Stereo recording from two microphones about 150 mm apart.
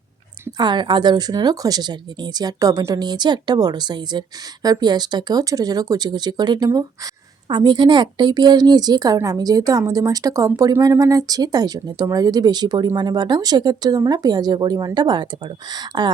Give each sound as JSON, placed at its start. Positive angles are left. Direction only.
{"t": 0.5, "sound": "a woman's voice", "side_deg": -30}